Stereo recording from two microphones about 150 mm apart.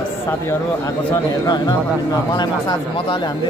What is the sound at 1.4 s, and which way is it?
Speech, 30° left (ahead or behind).